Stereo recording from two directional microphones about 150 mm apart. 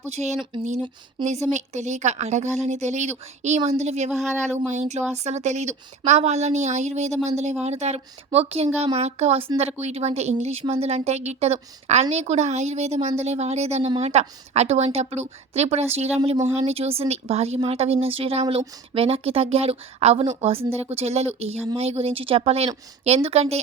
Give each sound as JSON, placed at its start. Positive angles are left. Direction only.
{"t": 0.1, "sound": "a woman's voice", "side_deg": -50}
{"t": 4.1, "sound": "speech", "side_deg": 0}
{"t": 4.7, "sound": "a woman's voice", "side_deg": -50}